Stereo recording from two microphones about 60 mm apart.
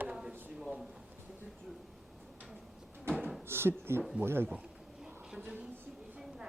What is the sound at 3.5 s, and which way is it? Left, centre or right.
Speech, right.